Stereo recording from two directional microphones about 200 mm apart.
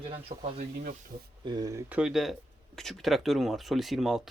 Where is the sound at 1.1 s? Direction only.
45° right (ahead or behind).